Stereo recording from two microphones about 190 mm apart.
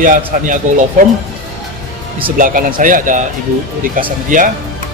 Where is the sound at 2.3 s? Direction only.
45° right (ahead or behind).